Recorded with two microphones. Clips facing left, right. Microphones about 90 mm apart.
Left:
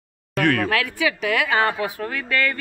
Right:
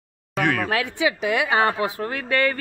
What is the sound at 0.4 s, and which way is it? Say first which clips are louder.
Speech: left 2 dB; 15° right (ahead or behind).